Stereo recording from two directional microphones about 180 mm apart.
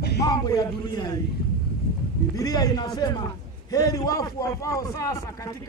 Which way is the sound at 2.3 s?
20° left (ahead or behind).